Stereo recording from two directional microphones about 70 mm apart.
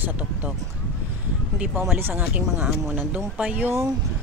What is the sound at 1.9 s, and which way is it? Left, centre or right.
Speech, right.